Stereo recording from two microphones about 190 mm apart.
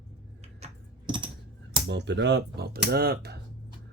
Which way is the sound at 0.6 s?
25° right (ahead or behind).